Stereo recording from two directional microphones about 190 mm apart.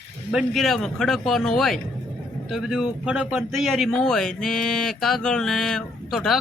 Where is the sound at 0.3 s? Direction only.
Centre (ahead or behind).